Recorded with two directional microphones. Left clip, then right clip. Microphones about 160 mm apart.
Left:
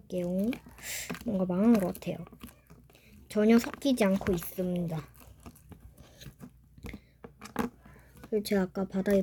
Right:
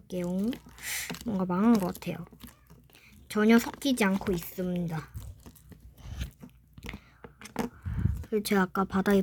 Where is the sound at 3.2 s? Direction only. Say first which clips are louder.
Right 1 dB; 25° right (ahead or behind).